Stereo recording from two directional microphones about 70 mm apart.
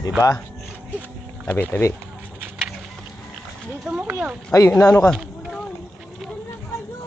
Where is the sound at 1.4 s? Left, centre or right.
Left.